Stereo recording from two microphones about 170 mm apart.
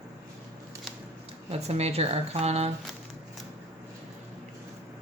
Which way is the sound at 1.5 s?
40° right (ahead or behind).